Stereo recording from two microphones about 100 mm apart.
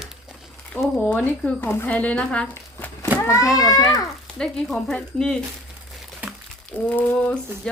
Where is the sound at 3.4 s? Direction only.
5° right (ahead or behind).